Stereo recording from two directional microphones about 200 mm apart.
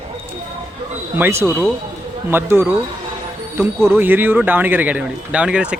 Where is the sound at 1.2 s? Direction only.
10° right (ahead or behind).